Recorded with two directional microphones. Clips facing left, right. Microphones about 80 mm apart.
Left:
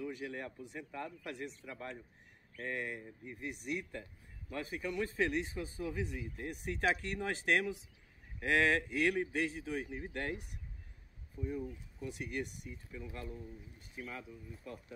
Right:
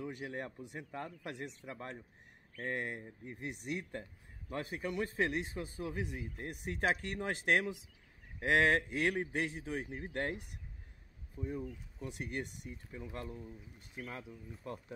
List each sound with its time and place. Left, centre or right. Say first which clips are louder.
0.0 s speech: even; right
12.0 s speech: left 1 dB; right